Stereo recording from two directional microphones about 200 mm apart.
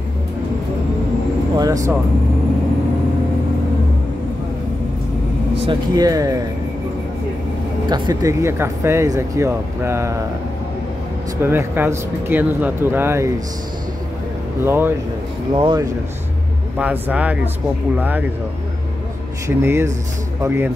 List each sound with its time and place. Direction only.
1.6 s speech: 15° right (ahead or behind)
5.7 s speech: 20° right (ahead or behind)
7.9 s speech: 20° right (ahead or behind)
11.4 s speech: 10° right (ahead or behind)
14.6 s speech: 10° right (ahead or behind)
15.5 s speech: 25° right (ahead or behind)
16.7 s speech: 10° right (ahead or behind)
19.4 s speech: 15° right (ahead or behind)